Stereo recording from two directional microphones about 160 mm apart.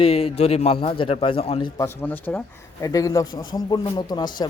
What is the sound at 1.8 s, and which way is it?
Speech, 10° left (ahead or behind).